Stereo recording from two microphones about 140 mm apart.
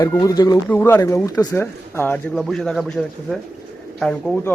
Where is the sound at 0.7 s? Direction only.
15° left (ahead or behind).